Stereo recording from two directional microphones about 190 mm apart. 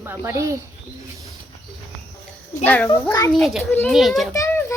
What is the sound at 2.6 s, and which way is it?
Speech, 10° left (ahead or behind).